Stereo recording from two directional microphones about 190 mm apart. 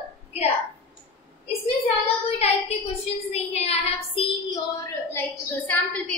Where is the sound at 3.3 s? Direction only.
35° left (ahead or behind).